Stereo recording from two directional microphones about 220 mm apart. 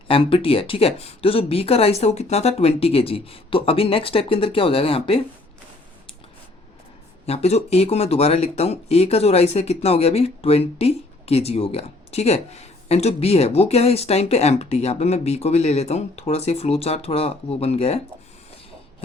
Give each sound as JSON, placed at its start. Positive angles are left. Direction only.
{"t": 0.1, "sound": "speech", "side_deg": 25}
{"t": 7.3, "sound": "speech", "side_deg": 30}